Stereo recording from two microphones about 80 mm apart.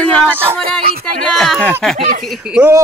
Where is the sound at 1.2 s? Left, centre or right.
Centre.